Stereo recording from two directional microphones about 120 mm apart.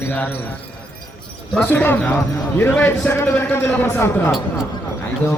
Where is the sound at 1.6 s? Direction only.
15° left (ahead or behind).